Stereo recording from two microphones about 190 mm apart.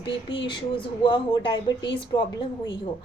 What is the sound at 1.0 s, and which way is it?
A woman's voice, 25° left (ahead or behind).